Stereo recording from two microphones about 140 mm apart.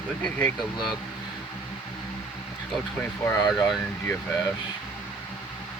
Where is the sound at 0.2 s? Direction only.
10° left (ahead or behind).